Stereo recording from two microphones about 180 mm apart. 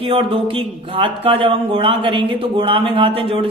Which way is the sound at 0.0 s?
30° right (ahead or behind).